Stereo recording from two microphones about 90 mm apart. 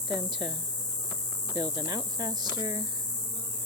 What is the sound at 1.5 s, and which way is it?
Speech, 45° right (ahead or behind).